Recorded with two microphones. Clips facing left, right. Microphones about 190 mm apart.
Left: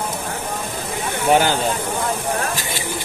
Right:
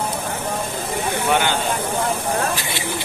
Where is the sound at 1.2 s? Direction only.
35° left (ahead or behind).